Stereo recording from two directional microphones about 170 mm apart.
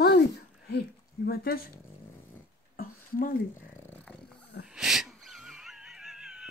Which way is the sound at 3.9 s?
5° left (ahead or behind).